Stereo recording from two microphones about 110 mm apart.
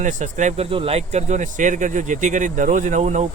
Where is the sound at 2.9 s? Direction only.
90° right.